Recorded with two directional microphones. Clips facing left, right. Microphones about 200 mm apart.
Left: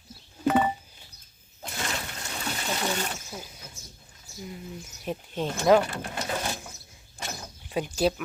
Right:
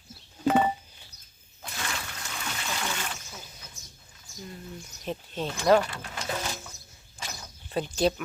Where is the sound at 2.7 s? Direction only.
35° left (ahead or behind).